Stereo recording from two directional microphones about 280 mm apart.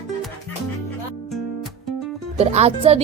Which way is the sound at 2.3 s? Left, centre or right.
Right.